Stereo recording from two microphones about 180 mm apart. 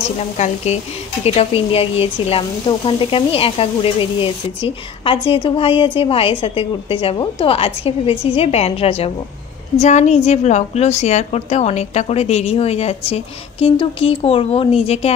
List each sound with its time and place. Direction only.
1.2 s a woman's voice: 35° left (ahead or behind)